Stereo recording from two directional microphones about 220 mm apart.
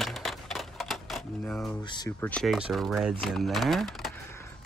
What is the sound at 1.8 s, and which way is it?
Speech, 20° left (ahead or behind).